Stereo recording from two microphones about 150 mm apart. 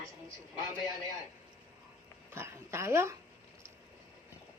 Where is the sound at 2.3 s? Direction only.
15° right (ahead or behind).